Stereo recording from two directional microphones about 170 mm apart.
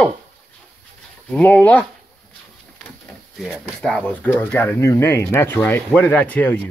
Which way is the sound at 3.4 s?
Centre (ahead or behind).